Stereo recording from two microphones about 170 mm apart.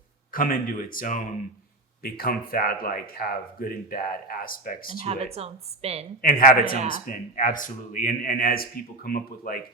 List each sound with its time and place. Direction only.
0.3 s speech: 55° left (ahead or behind)
2.0 s speech: 60° left (ahead or behind)
5.0 s speech: 35° right (ahead or behind)
6.2 s speech: 55° left (ahead or behind)